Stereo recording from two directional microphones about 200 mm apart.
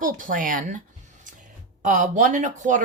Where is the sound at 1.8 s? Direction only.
40° right (ahead or behind).